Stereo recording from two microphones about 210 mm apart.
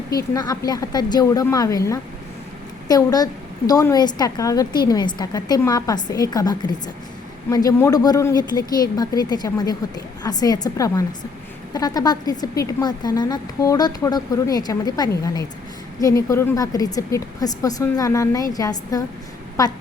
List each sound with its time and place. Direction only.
0.3 s a woman's voice: 20° left (ahead or behind)